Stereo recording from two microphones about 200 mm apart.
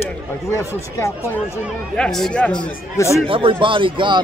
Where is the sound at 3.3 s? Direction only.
25° right (ahead or behind).